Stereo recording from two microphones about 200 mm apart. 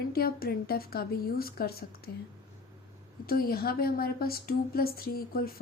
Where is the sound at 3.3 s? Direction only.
50° left (ahead or behind).